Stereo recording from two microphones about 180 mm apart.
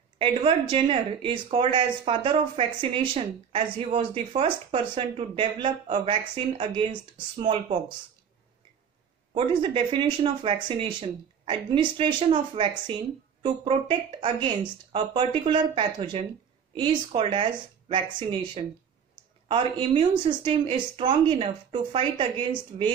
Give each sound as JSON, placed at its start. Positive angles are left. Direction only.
{"t": 0.2, "sound": "speech", "side_deg": -30}
{"t": 9.3, "sound": "speech", "side_deg": -25}